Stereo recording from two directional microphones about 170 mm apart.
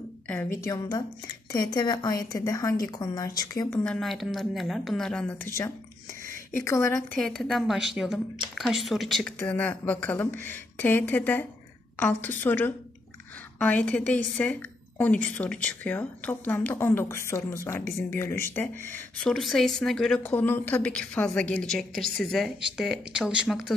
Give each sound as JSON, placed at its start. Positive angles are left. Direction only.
{"t": 0.6, "sound": "speech", "side_deg": 20}
{"t": 3.8, "sound": "a woman's voice", "side_deg": 5}
{"t": 6.5, "sound": "a woman's voice", "side_deg": 15}
{"t": 7.1, "sound": "a woman's voice", "side_deg": 5}
{"t": 19.3, "sound": "a woman's voice", "side_deg": 0}